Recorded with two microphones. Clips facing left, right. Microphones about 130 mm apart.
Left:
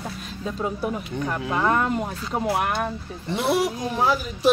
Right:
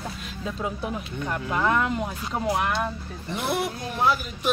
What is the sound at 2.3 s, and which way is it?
Speech, 5° left (ahead or behind).